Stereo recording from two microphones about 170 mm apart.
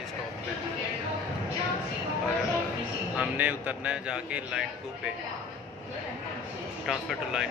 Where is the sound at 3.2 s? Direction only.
10° right (ahead or behind).